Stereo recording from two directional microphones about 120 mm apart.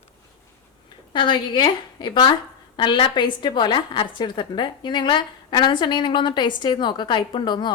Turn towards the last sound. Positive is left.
turn(degrees=40)  # may be behind; listen again after turning